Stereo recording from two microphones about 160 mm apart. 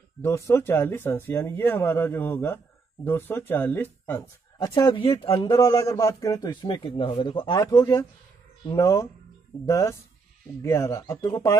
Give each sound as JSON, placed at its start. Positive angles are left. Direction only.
{"t": 0.2, "sound": "speech", "side_deg": 15}
{"t": 5.8, "sound": "a man's voice", "side_deg": 20}